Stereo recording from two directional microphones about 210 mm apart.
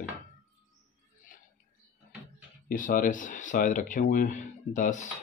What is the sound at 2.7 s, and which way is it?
Speech, 40° left (ahead or behind).